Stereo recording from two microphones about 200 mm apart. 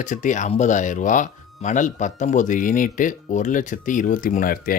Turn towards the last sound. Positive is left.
turn(degrees=45)  # may be behind; listen again after turning